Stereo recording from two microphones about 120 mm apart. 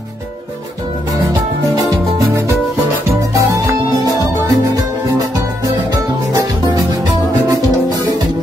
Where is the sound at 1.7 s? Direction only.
30° right (ahead or behind).